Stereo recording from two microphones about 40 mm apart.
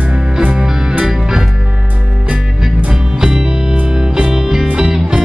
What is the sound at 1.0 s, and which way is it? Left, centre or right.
Music, centre.